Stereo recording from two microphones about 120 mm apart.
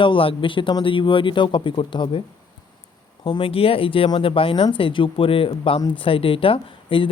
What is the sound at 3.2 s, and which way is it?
Speech, 50° left (ahead or behind).